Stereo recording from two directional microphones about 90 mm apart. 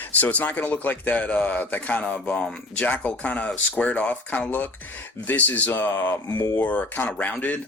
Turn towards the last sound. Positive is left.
turn(degrees=15)  # may be behind; listen again after turning